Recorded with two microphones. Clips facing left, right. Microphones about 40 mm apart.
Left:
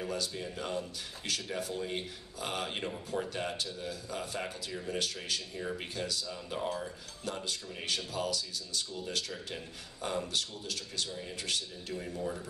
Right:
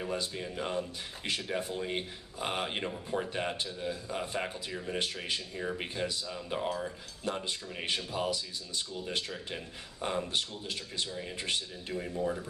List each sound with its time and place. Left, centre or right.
0.0 s a man's voice: right